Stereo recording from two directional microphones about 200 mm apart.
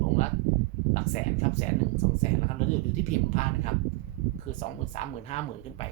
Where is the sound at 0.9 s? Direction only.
35° left (ahead or behind).